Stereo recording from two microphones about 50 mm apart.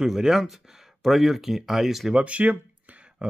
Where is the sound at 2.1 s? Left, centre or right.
Right.